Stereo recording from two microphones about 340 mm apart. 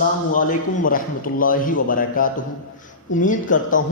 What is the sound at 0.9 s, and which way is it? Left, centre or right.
A man's voice, left.